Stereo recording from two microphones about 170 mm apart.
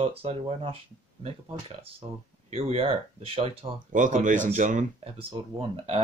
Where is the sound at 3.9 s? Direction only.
50° right (ahead or behind).